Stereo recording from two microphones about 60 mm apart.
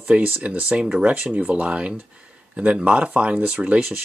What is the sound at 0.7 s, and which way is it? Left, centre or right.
Speech, centre.